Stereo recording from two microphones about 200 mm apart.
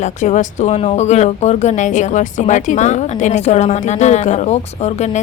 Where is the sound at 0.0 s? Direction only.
35° left (ahead or behind).